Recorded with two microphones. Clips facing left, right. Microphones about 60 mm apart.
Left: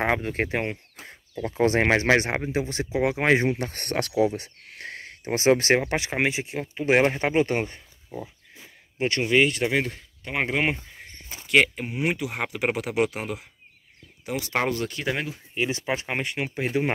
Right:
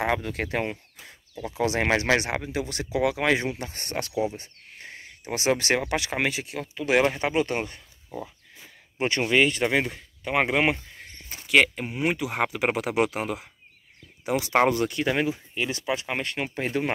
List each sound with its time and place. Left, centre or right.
0.0 s speech: left
1.6 s speech: left
4.2 s a sound: left
5.2 s speech: left
9.2 s speech: centre
11.0 s a sound: centre
11.4 s speech: centre
14.2 s speech: centre
15.5 s speech: left
16.2 s speech: centre